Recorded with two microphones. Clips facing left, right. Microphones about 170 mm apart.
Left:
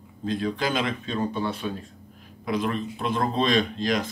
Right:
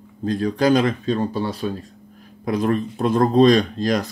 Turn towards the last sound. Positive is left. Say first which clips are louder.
# right 4 dB
turn(degrees=-45)  # may be behind; listen again after turning